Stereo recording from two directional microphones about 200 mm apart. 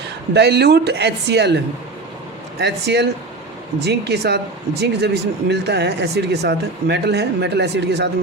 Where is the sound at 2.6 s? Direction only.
55° right (ahead or behind).